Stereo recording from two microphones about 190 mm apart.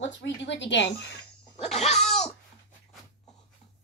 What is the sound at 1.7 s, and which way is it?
Speech, 35° left (ahead or behind).